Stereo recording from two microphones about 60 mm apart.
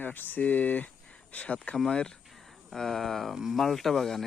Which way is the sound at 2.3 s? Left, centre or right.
Centre.